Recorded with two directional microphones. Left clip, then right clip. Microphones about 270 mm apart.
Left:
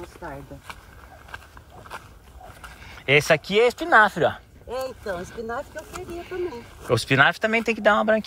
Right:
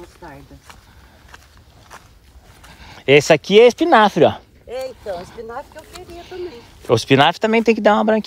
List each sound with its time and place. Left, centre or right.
0.0 s speech: centre
3.2 s speech: right
4.6 s vehicle: left
6.2 s speech: centre